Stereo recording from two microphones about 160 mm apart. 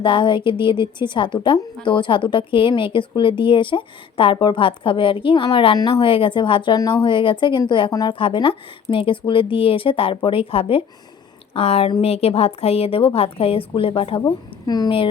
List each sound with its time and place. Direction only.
0.0 s a woman's voice: 30° left (ahead or behind)